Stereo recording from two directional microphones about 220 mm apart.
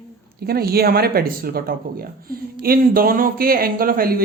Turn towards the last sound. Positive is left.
turn(degrees=-40)  # may be behind; listen again after turning